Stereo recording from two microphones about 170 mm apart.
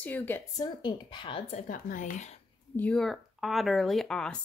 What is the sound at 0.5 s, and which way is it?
Speech, 25° left (ahead or behind).